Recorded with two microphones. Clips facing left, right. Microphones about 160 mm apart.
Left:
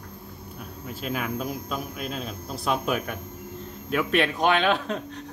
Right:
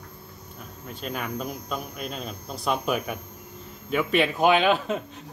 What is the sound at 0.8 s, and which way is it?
A man's voice, 5° left (ahead or behind).